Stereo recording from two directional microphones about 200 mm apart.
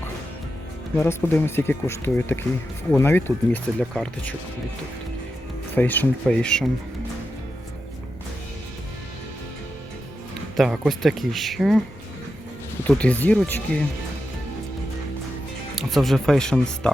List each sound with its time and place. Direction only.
0.9 s speech: 10° left (ahead or behind)
5.7 s speech: 10° left (ahead or behind)
10.6 s speech: centre (ahead or behind)
12.9 s speech: 5° left (ahead or behind)
15.7 s speech: centre (ahead or behind)